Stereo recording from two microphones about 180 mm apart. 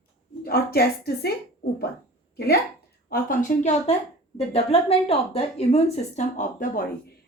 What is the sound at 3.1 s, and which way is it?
Speech, 55° left (ahead or behind).